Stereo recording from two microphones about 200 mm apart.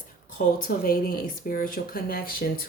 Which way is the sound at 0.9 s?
45° left (ahead or behind).